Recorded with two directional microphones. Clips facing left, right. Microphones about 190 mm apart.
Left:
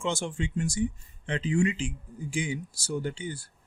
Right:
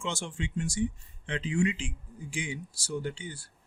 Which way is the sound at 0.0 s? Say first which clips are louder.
Left 5 dB; 45° left (ahead or behind).